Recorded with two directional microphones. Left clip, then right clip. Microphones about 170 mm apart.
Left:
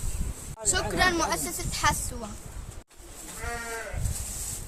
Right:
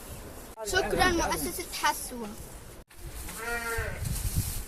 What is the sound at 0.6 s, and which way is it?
Speech, 20° left (ahead or behind).